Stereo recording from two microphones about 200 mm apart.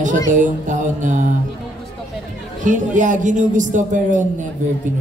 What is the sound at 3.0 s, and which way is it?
Speech, 40° right (ahead or behind).